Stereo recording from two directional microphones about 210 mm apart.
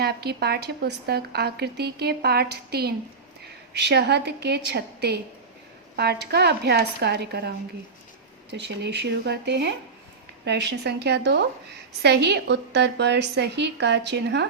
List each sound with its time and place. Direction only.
0.0 s speech: 50° right (ahead or behind)